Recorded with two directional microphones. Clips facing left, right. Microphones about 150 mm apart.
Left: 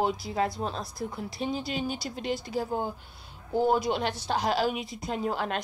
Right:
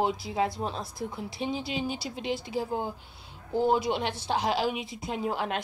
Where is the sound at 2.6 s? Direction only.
5° right (ahead or behind).